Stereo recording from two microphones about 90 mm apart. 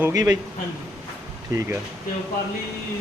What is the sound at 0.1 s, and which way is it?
Speech, 45° right (ahead or behind).